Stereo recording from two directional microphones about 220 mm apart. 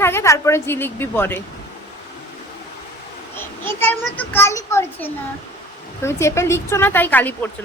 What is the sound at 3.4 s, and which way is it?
A child's voice, 10° left (ahead or behind).